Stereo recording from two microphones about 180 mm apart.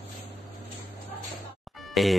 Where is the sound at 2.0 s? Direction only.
Centre (ahead or behind).